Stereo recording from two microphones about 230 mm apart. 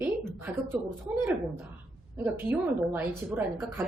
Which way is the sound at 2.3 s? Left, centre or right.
Centre.